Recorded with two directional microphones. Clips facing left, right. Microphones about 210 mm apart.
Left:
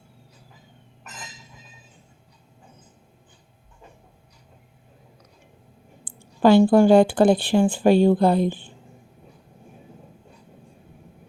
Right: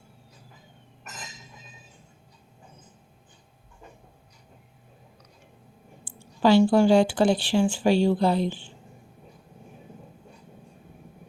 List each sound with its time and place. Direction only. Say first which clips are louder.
6.1 s speech: left 4 dB; 55° left (ahead or behind)